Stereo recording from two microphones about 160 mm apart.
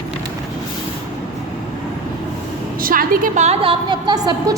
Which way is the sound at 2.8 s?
60° right (ahead or behind).